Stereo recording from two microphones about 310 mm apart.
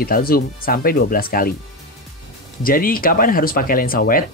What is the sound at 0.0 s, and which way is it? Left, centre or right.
Speech, left.